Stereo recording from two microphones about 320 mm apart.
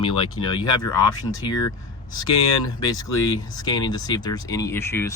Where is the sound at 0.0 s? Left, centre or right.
Centre.